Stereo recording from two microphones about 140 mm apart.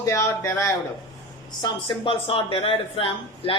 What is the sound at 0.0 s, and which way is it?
Speech, 20° left (ahead or behind).